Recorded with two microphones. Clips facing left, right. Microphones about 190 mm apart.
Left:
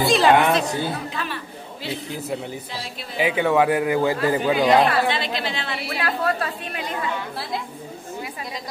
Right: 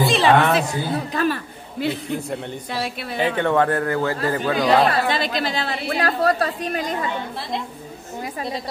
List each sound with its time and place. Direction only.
0.0 s a sound: centre (ahead or behind)
1.1 s a sound: 45° right (ahead or behind)
2.2 s speech: 5° left (ahead or behind)
2.7 s a woman's voice: 60° right (ahead or behind)
3.2 s a man's voice: 10° left (ahead or behind)
4.8 s a woman's voice: 40° right (ahead or behind)
8.2 s a woman's voice: 35° right (ahead or behind)